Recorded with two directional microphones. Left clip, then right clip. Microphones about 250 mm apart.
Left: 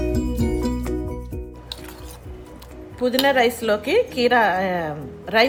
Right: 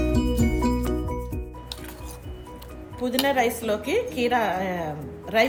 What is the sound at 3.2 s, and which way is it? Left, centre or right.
A woman's voice, left.